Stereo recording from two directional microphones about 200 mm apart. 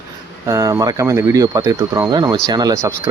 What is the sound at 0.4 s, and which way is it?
Speech, 15° right (ahead or behind).